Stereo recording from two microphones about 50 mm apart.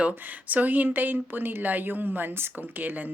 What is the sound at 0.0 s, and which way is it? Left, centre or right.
Speech, right.